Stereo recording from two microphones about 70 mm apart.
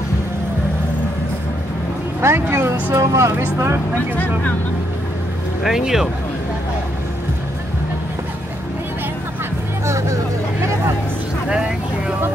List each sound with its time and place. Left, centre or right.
2.2 s speech: right
5.6 s speech: centre
9.8 s vehicle: right
10.6 s a sound: right